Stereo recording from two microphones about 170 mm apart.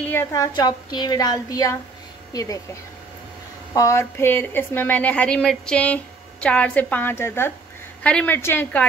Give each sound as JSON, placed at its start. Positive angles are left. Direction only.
{"t": 0.1, "sound": "speech", "side_deg": 15}
{"t": 3.7, "sound": "speech", "side_deg": 15}